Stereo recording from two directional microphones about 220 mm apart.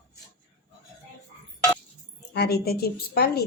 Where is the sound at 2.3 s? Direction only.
45° left (ahead or behind).